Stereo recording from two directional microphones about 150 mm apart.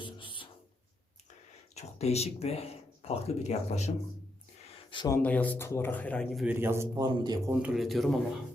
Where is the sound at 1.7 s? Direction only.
45° left (ahead or behind).